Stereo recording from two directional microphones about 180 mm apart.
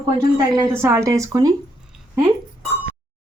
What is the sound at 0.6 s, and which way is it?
Speech, 15° right (ahead or behind).